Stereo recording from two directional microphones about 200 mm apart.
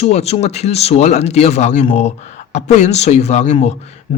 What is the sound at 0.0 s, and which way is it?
Speech, 30° left (ahead or behind).